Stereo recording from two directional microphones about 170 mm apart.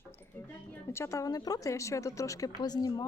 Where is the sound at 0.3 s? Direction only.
15° left (ahead or behind).